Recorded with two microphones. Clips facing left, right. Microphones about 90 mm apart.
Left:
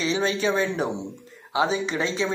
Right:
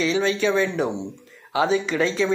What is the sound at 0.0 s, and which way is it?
Speech, 30° left (ahead or behind).